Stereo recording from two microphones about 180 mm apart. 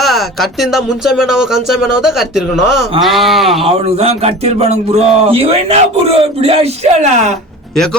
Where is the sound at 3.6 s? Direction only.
35° right (ahead or behind).